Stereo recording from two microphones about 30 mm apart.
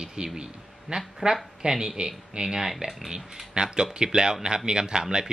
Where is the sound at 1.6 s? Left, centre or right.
Right.